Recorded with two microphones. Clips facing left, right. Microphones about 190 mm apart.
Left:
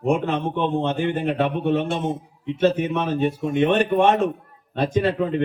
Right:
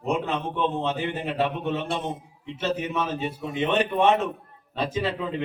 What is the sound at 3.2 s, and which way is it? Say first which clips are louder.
Speech: left 8 dB; 55° left (ahead or behind).